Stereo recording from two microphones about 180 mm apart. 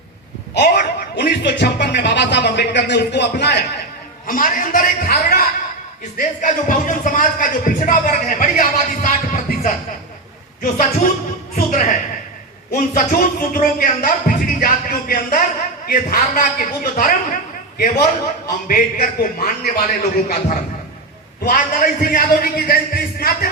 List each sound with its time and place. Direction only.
0.5 s a man's voice: 60° left (ahead or behind)
4.3 s a man's voice: 50° left (ahead or behind)
21.4 s a man's voice: 50° left (ahead or behind)